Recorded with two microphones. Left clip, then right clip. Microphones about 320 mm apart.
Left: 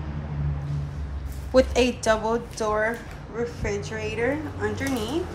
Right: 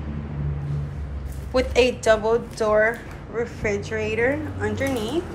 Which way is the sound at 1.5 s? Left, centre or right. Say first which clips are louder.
Right 1 dB; centre.